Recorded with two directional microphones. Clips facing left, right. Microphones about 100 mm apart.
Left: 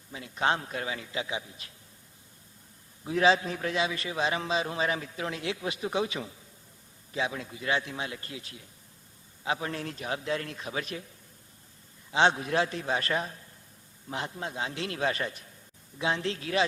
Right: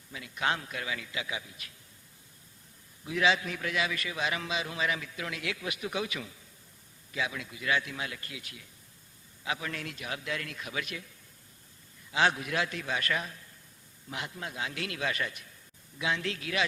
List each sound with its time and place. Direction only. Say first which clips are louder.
0.1 s a man's voice: left 4 dB; 30° left (ahead or behind)
3.0 s a man's voice: left 4 dB; 35° left (ahead or behind)
12.1 s a man's voice: left 4 dB; 30° left (ahead or behind)